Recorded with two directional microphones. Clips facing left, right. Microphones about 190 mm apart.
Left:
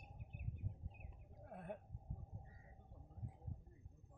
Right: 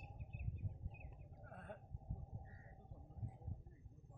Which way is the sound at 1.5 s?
15° left (ahead or behind).